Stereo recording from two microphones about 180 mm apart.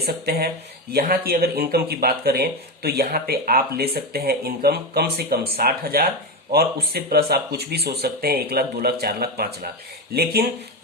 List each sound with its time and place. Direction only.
0.0 s speech: 60° right (ahead or behind)